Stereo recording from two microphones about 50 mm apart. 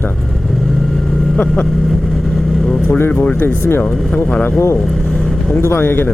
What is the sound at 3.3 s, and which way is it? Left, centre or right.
Speech, left.